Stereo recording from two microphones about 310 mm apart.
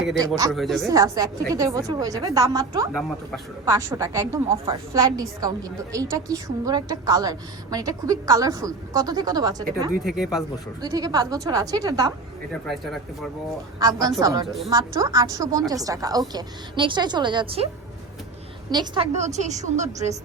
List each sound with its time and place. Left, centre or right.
0.5 s speech: centre
0.9 s a woman's voice: centre
10.0 s speech: centre
10.8 s a woman's voice: centre
12.6 s speech: centre
13.7 s a woman's voice: centre
14.4 s speech: centre
14.7 s a woman's voice: centre
18.7 s a woman's voice: centre